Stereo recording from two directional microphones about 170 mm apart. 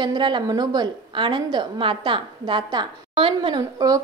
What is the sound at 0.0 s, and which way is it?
A woman's voice, 25° right (ahead or behind).